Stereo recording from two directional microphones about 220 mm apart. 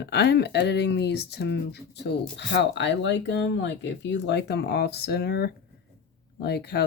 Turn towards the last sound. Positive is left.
turn(degrees=50)  # may be behind; listen again after turning